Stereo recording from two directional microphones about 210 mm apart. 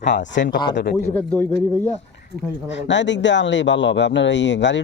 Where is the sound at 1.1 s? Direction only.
10° left (ahead or behind).